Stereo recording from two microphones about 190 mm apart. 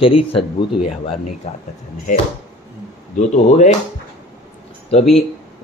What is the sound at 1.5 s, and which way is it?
Speech, 35° left (ahead or behind).